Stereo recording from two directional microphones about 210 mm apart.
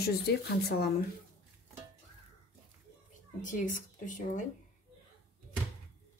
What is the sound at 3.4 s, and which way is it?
Speech, 40° left (ahead or behind).